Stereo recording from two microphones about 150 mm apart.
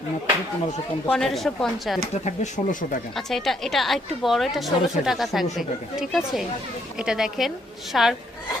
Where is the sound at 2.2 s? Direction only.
55° left (ahead or behind).